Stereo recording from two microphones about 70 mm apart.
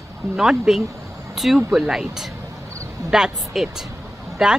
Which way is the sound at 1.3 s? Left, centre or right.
Centre.